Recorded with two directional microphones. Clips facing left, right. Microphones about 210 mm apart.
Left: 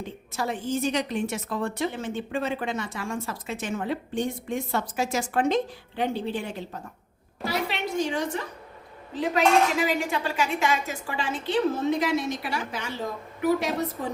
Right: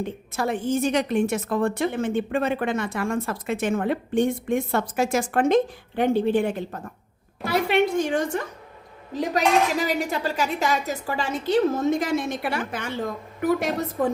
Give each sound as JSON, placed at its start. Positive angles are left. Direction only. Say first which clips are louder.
{"t": 0.0, "sound": "a woman's voice", "louder": "right 4 dB", "side_deg": -55}
{"t": 9.8, "sound": "a woman's voice", "louder": "right 1 dB", "side_deg": -40}